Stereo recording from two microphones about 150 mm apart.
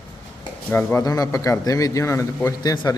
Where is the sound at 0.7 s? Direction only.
20° left (ahead or behind).